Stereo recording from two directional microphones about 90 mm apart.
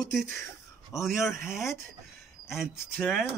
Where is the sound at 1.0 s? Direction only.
5° right (ahead or behind).